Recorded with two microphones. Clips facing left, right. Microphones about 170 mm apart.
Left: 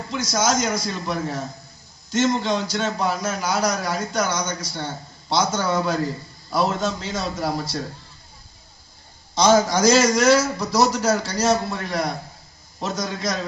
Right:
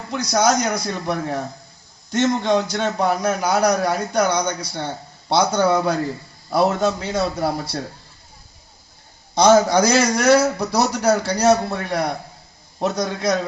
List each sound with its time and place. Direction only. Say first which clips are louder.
0.1 s a man's voice: right 4 dB; 60° right (ahead or behind)
9.3 s a man's voice: right 3 dB; 55° right (ahead or behind)